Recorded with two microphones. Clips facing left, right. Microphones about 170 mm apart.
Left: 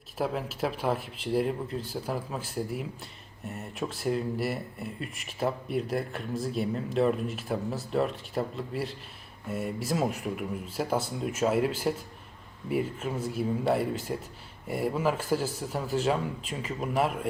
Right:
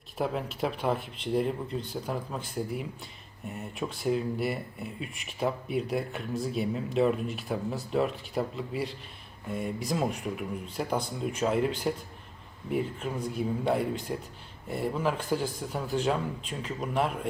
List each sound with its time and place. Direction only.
0.2 s speech: centre (ahead or behind)